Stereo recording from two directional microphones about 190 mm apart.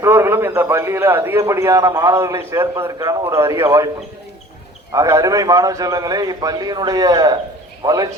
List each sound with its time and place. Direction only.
0.0 s a man's voice: 15° right (ahead or behind)
4.9 s a man's voice: 15° right (ahead or behind)